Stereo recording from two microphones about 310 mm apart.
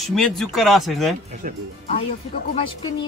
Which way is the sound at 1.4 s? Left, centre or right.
Right.